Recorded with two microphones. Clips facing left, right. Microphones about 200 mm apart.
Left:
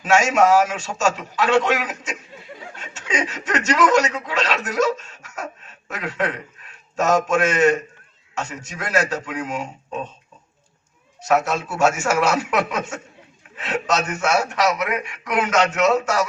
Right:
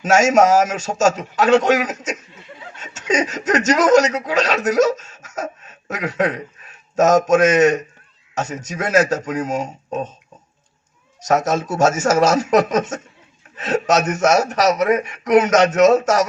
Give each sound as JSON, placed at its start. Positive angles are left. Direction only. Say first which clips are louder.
{"t": 0.0, "sound": "speech", "louder": "right 3 dB", "side_deg": -40}
{"t": 11.3, "sound": "speech", "louder": "right 2 dB", "side_deg": -40}